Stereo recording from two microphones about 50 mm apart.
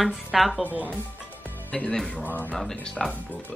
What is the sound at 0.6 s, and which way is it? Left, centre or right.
Speech, right.